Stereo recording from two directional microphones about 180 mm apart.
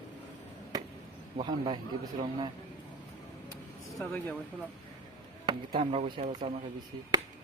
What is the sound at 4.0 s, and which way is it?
Speech, 10° left (ahead or behind).